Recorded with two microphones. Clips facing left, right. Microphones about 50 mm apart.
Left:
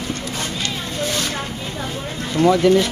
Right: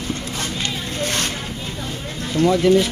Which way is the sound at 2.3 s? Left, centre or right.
Centre.